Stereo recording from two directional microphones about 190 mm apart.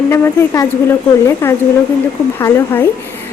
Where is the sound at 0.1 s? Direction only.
15° left (ahead or behind).